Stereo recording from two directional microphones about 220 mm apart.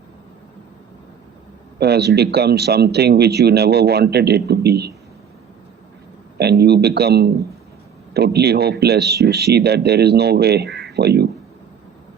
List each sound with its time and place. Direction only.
1.8 s speech: 50° right (ahead or behind)
6.3 s speech: 45° right (ahead or behind)